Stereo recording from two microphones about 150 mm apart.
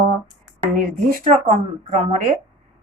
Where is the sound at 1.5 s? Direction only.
50° right (ahead or behind).